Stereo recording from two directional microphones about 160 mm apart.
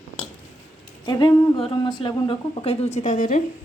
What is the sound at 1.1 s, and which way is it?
Speech, 25° left (ahead or behind).